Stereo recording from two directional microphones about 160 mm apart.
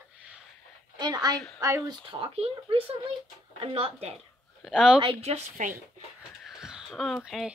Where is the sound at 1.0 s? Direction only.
25° right (ahead or behind).